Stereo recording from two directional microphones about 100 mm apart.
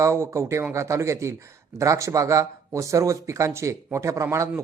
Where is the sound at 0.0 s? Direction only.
30° right (ahead or behind).